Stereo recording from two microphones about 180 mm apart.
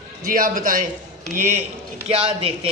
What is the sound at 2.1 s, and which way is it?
Speech, 30° right (ahead or behind).